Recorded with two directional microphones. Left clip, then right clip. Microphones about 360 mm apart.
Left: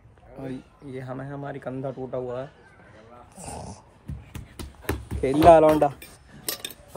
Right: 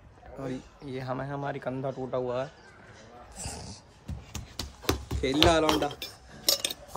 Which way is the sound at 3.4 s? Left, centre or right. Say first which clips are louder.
Left 4 dB; centre.